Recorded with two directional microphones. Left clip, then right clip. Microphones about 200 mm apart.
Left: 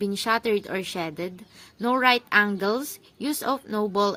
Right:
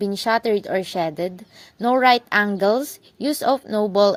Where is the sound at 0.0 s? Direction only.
15° right (ahead or behind).